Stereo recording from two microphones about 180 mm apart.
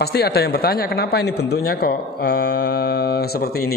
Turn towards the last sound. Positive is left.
turn(degrees=55)  # may be behind; listen again after turning